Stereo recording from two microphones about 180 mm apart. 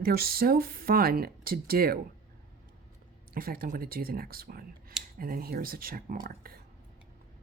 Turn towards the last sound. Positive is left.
turn(degrees=-55)  # may be behind; listen again after turning